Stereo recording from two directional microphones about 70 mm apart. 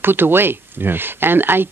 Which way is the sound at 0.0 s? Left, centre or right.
Right.